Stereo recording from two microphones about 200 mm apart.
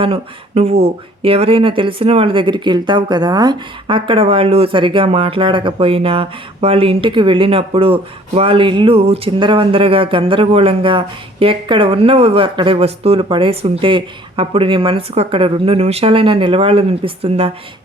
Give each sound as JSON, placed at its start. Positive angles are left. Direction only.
{"t": 0.0, "sound": "speech", "side_deg": -30}